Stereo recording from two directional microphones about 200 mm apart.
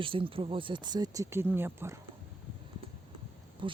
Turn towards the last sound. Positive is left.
turn(degrees=-25)  # may be behind; listen again after turning